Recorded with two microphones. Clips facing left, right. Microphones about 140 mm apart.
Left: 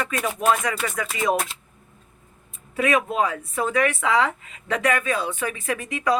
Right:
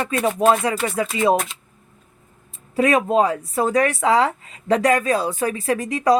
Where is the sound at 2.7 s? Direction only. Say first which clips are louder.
Right 5 dB; 35° right (ahead or behind).